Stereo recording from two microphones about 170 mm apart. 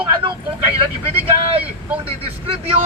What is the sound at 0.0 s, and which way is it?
Vehicle, 30° right (ahead or behind).